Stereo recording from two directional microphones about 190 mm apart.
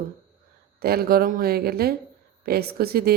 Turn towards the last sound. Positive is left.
turn(degrees=-55)  # may be behind; listen again after turning